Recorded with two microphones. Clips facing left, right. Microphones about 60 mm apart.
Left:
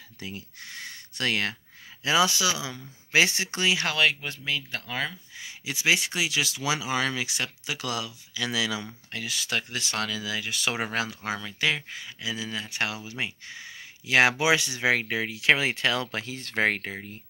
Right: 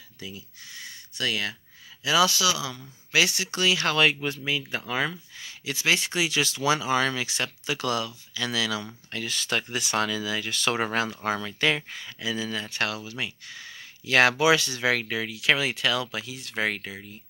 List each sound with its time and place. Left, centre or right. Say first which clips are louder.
0.2 s speech: left 2 dB; left
2.0 s speech: right 1 dB; left
3.8 s speech: right 2 dB; centre
5.4 s speech: even; centre; by 17.2 s left